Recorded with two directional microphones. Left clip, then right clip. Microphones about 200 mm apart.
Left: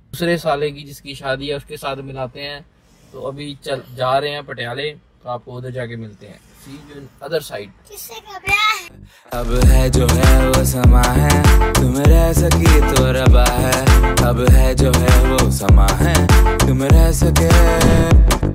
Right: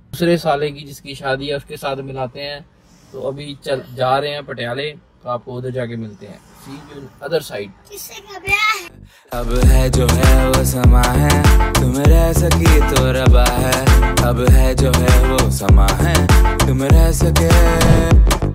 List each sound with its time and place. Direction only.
0.1 s music: centre (ahead or behind)
7.2 s music: centre (ahead or behind)
9.3 s music: centre (ahead or behind)